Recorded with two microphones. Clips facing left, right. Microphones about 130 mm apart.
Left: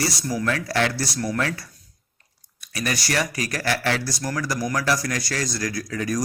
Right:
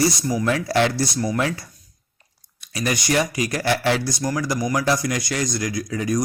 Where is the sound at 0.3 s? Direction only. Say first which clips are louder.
Right 3 dB; 20° right (ahead or behind).